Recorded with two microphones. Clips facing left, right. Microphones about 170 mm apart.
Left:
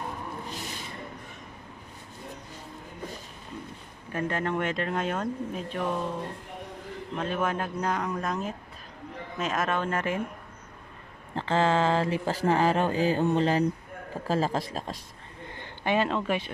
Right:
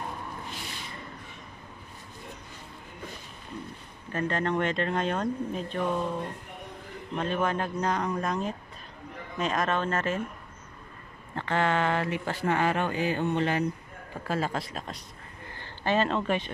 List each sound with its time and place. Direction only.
4.1 s speech: 10° left (ahead or behind)
7.2 s a man's voice: 5° left (ahead or behind)
11.3 s speech: 25° left (ahead or behind)
15.5 s speech: 15° left (ahead or behind)